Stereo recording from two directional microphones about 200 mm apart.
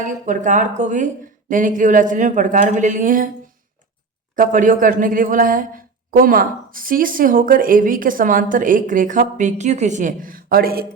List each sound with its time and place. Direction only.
0.0 s speech: 40° right (ahead or behind)
4.4 s speech: 40° right (ahead or behind)